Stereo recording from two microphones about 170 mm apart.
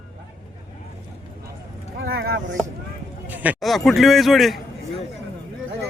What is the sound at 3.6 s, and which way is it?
Speech, centre (ahead or behind).